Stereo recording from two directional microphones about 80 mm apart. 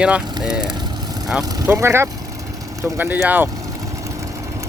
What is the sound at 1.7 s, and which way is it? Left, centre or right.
Speech, right.